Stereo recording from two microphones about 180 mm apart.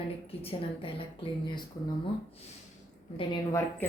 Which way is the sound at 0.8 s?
25° left (ahead or behind).